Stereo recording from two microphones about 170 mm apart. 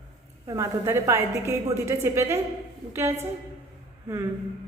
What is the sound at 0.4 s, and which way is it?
A woman's voice, 15° right (ahead or behind).